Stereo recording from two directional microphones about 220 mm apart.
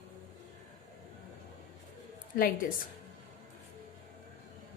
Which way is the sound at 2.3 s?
40° left (ahead or behind).